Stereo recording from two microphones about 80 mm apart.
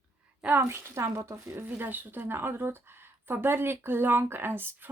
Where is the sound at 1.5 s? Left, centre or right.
Right.